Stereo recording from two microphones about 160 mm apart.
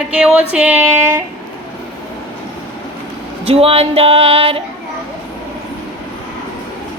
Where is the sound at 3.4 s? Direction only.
40° right (ahead or behind).